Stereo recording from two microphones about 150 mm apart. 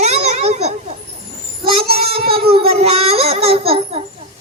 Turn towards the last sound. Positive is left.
turn(degrees=-40)  # may be behind; listen again after turning